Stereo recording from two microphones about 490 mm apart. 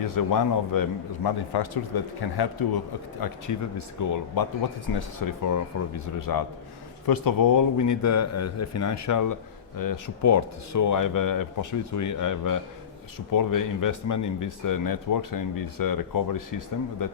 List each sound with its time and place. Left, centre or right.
0.0 s speech: left